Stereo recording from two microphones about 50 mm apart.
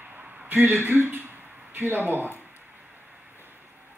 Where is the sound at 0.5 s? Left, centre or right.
Right.